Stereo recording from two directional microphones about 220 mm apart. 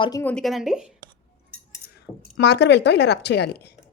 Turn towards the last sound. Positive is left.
turn(degrees=45)  # may be behind; listen again after turning